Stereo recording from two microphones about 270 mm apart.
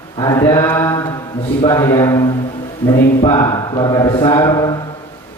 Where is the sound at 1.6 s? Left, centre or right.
Centre.